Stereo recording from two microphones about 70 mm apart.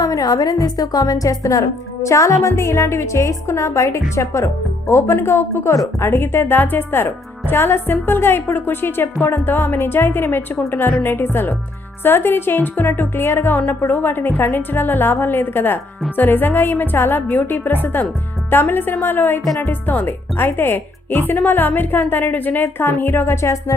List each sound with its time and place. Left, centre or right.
0.0 s a woman's voice: left